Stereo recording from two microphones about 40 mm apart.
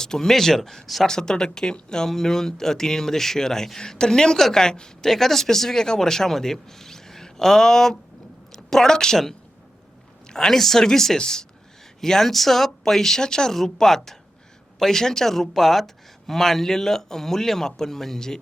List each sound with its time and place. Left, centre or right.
0.0 s speech: centre
1.0 s speech: centre